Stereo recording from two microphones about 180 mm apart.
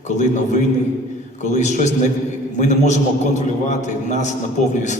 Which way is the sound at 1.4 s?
40° left (ahead or behind).